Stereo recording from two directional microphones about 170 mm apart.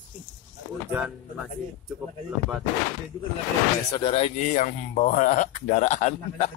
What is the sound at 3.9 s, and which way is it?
Speech, 35° left (ahead or behind).